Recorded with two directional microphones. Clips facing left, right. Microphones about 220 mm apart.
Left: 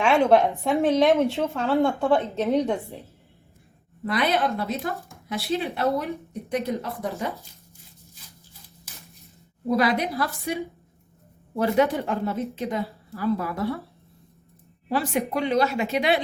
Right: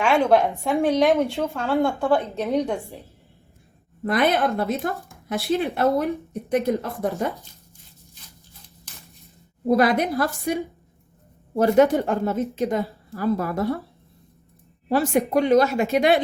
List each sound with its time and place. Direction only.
0.0 s a woman's voice: centre (ahead or behind)
4.0 s a woman's voice: 50° right (ahead or behind)
9.6 s a woman's voice: 50° right (ahead or behind)
14.8 s a woman's voice: 45° right (ahead or behind)